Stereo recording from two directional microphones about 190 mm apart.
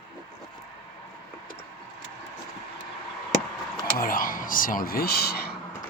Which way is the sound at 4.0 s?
45° left (ahead or behind).